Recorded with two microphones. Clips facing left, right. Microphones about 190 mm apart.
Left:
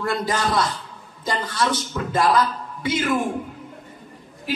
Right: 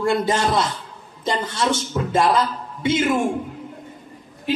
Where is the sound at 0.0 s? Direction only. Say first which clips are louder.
Right 4 dB; 25° right (ahead or behind).